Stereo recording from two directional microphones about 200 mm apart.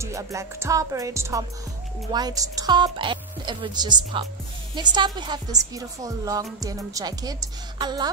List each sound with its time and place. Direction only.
0.0 s music: 15° right (ahead or behind)
2.1 s a woman's voice: 20° right (ahead or behind)